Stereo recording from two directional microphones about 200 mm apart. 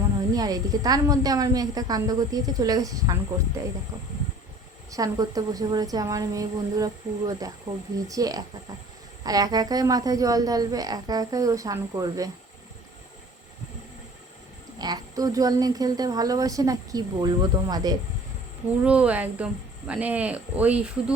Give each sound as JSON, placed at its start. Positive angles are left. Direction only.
{"t": 0.3, "sound": "speech", "side_deg": -20}
{"t": 4.9, "sound": "speech", "side_deg": -15}
{"t": 14.8, "sound": "speech", "side_deg": -20}
{"t": 18.9, "sound": "speech", "side_deg": -5}